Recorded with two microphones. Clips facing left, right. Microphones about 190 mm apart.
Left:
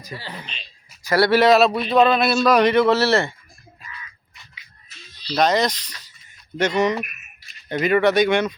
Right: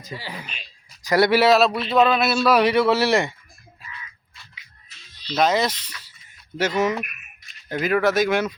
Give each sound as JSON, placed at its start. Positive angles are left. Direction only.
{"t": 0.0, "sound": "a man's voice", "side_deg": -15}
{"t": 1.4, "sound": "a man's voice", "side_deg": 0}
{"t": 4.5, "sound": "music", "side_deg": 35}
{"t": 5.4, "sound": "a man's voice", "side_deg": -5}
{"t": 6.1, "sound": "a sound", "side_deg": -5}
{"t": 7.7, "sound": "speech", "side_deg": 0}